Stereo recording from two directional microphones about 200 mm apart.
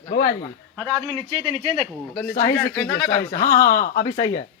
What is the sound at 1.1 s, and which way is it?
Speech, 25° right (ahead or behind).